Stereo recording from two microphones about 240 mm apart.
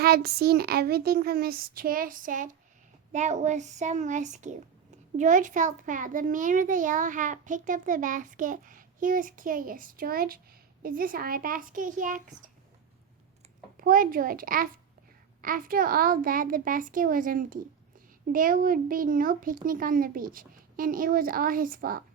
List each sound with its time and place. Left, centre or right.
0.0 s a child's voice: right
13.8 s a child's voice: right